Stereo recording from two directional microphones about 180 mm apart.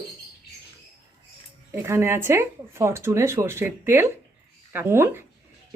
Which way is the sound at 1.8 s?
15° right (ahead or behind).